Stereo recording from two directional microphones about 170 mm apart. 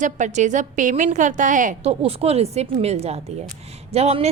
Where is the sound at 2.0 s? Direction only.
35° right (ahead or behind).